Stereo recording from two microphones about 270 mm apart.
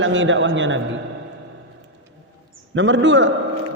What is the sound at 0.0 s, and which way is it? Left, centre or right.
Speech, right.